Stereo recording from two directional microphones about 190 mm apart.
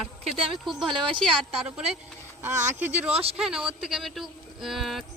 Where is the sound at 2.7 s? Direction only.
10° right (ahead or behind).